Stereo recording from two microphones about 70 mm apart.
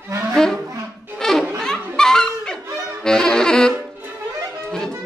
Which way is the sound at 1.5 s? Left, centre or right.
Centre.